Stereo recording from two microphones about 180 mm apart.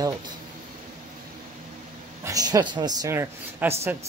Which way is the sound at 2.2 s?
20° right (ahead or behind).